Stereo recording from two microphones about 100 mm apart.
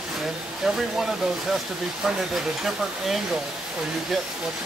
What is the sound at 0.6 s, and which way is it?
Speech, 5° right (ahead or behind).